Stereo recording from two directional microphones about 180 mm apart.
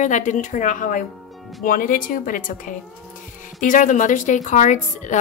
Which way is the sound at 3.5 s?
45° left (ahead or behind).